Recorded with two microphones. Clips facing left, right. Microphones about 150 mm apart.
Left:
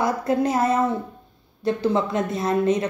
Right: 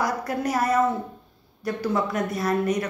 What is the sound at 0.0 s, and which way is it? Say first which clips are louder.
A woman's voice: left 5 dB; 25° left (ahead or behind).